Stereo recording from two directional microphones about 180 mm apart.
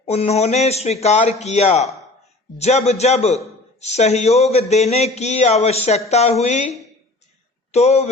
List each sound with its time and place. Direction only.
0.0 s speech: 35° left (ahead or behind)
7.7 s speech: 35° left (ahead or behind)